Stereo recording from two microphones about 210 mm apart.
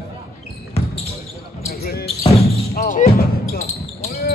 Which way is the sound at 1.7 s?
45° left (ahead or behind).